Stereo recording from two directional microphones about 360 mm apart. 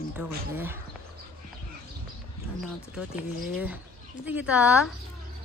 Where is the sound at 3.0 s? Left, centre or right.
Centre.